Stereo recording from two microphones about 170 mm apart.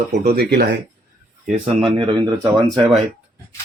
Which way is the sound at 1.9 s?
25° right (ahead or behind).